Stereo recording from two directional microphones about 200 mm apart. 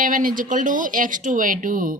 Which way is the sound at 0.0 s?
45° right (ahead or behind).